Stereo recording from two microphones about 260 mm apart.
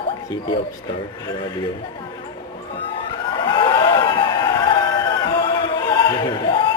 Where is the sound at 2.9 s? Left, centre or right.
Centre.